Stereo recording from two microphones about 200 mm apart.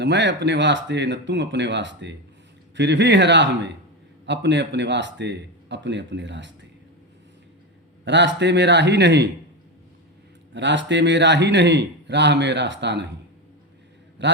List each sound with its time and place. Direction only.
0.0 s a man's voice: 60° right (ahead or behind)
8.0 s a man's voice: 60° right (ahead or behind)
10.5 s a man's voice: 65° right (ahead or behind)
14.2 s a man's voice: 60° right (ahead or behind)